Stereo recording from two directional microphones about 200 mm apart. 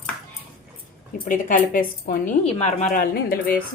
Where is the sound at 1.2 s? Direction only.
40° left (ahead or behind).